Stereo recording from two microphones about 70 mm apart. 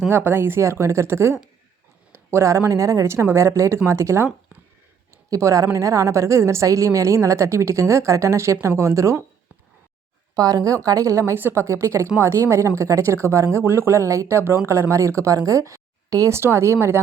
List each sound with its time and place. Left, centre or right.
0.1 s speech: right
10.3 s speech: right
11.3 s speech: right
11.6 s speech: right
16.3 s speech: right